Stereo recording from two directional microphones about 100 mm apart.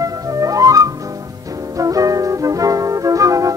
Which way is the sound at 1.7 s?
35° right (ahead or behind).